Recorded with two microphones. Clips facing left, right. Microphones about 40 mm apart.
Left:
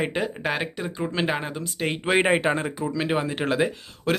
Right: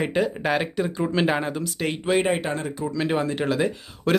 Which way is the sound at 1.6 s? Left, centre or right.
Centre.